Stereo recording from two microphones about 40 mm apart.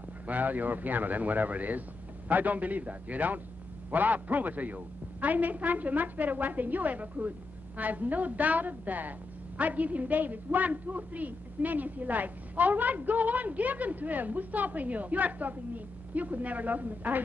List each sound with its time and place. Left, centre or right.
0.3 s a woman's voice: right